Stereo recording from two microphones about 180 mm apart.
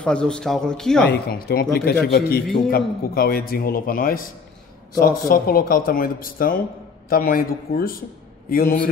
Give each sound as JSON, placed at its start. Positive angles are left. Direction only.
{"t": 0.0, "sound": "speech", "side_deg": 5}
{"t": 1.1, "sound": "a man's voice", "side_deg": 55}